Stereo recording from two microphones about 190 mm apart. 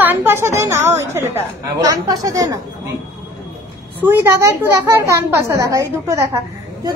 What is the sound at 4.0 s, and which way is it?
A woman's voice, 10° right (ahead or behind).